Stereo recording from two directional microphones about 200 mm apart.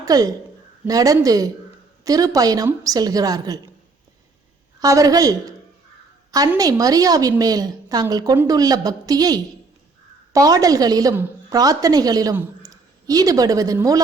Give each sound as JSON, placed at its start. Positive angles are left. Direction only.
{"t": 0.0, "sound": "a woman's voice", "side_deg": -20}
{"t": 4.8, "sound": "a woman's voice", "side_deg": -15}